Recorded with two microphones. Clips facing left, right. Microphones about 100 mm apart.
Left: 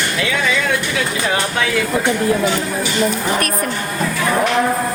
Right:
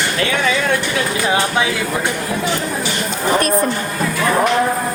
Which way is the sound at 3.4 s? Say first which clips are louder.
Right 4 dB; 25° right (ahead or behind).